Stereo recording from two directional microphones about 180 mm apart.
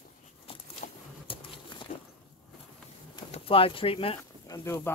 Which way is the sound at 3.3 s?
30° left (ahead or behind).